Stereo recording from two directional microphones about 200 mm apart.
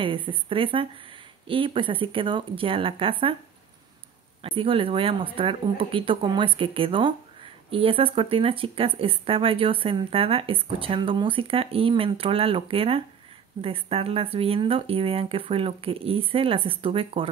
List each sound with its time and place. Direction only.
0.0 s speech: 25° right (ahead or behind)
4.4 s speech: 25° right (ahead or behind)